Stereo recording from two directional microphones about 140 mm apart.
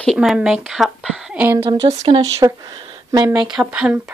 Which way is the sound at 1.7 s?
25° right (ahead or behind).